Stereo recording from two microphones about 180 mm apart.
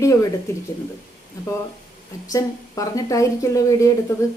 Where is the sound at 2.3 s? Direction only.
20° left (ahead or behind).